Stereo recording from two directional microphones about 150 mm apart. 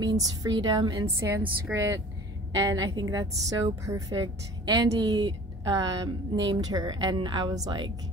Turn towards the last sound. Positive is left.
turn(degrees=-25)  # may be behind; listen again after turning